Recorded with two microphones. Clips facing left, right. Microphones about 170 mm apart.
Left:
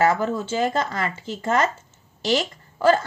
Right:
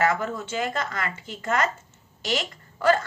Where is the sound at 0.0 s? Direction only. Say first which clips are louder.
Left 4 dB; 30° left (ahead or behind).